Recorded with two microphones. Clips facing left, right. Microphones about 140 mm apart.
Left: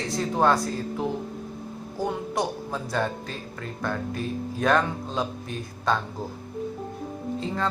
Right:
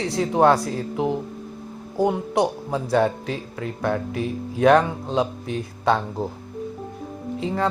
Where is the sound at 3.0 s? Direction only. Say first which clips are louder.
Right 7 dB; 80° right.